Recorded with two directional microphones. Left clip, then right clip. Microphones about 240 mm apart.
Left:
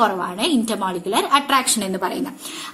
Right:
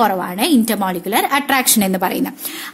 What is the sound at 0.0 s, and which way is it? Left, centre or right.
Speech, right.